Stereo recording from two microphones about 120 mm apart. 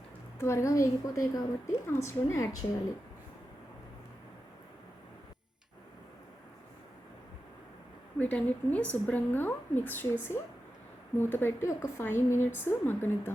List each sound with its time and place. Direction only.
0.3 s a woman's voice: 25° left (ahead or behind)
8.2 s a woman's voice: 10° left (ahead or behind)